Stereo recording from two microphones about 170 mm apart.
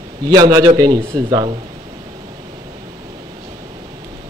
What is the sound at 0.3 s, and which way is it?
A man's voice, 25° right (ahead or behind).